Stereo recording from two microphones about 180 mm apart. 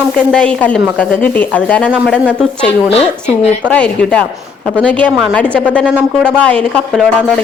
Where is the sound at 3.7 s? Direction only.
5° left (ahead or behind).